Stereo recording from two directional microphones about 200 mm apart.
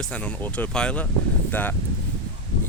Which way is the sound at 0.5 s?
5° left (ahead or behind).